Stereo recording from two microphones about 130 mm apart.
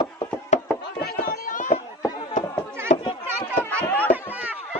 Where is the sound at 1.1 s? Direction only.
90° left.